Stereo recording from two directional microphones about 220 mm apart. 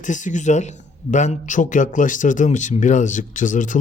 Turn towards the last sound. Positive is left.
turn(degrees=35)  # may be behind; listen again after turning